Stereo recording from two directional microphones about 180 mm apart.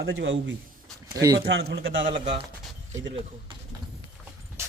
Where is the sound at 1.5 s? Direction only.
70° right (ahead or behind); by 2.2 s 85° right.